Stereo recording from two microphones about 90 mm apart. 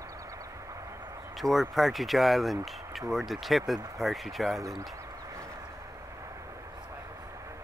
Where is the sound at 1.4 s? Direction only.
Centre (ahead or behind).